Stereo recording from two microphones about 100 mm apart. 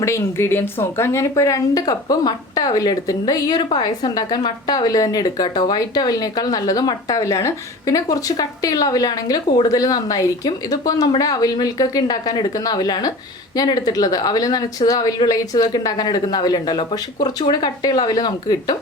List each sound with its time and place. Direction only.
0.0 s a woman's voice: 25° left (ahead or behind); by 18.8 s 45° left (ahead or behind)